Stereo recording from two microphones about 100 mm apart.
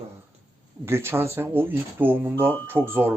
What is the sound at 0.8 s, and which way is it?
Speech, 25° right (ahead or behind).